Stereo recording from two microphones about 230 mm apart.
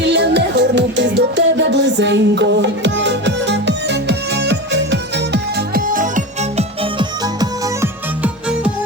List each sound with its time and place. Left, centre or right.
0.0 s music: right
7.0 s music: centre
8.2 s music: centre